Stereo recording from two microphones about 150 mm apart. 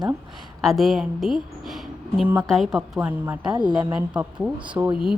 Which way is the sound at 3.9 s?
5° right (ahead or behind).